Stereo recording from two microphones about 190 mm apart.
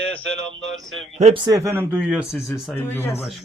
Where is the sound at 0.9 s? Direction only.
Centre (ahead or behind).